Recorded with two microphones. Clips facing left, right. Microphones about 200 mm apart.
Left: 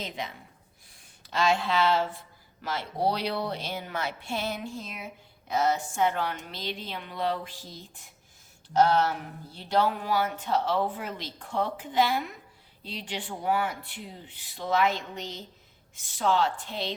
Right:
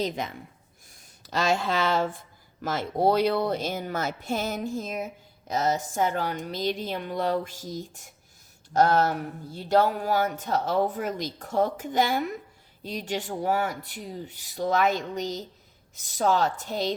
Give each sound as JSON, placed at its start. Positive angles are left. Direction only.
{"t": 0.0, "sound": "speech", "side_deg": -45}